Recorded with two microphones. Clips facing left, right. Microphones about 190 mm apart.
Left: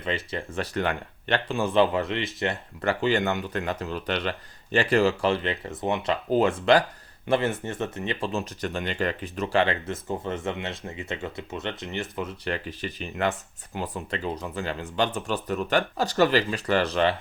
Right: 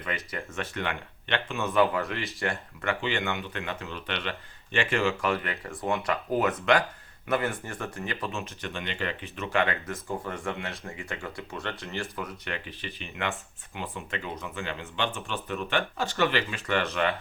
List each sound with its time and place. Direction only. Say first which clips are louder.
0.3 s speech: left 4 dB; 30° left (ahead or behind)
2.8 s speech: left 6 dB; 35° left (ahead or behind)